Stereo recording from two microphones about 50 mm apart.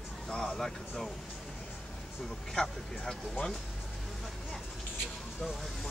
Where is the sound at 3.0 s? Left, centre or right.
Centre.